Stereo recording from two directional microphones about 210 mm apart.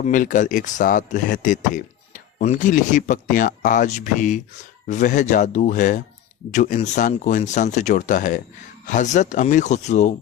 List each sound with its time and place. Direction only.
0.0 s speech: 40° left (ahead or behind)